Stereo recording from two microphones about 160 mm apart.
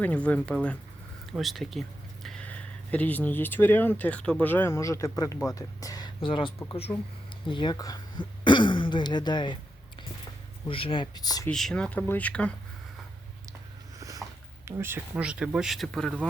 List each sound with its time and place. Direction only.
0.0 s speech: 10° left (ahead or behind)
6.1 s speech: 30° left (ahead or behind)
10.7 s speech: 35° left (ahead or behind)
11.4 s speech: 5° left (ahead or behind)
14.0 s speech: 20° right (ahead or behind); by 16.1 s 5° left (ahead or behind)